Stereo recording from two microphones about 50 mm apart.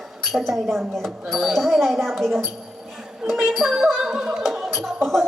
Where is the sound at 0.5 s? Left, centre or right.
Centre.